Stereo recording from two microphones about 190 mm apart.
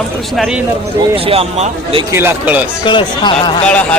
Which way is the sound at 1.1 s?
30° right (ahead or behind).